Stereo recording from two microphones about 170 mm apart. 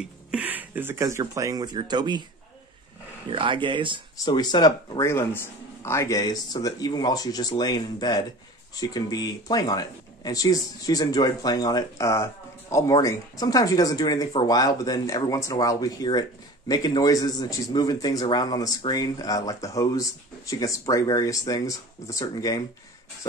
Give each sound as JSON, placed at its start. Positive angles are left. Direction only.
{"t": 0.3, "sound": "speech", "side_deg": -10}
{"t": 3.3, "sound": "speech", "side_deg": -30}
{"t": 4.2, "sound": "speech", "side_deg": 25}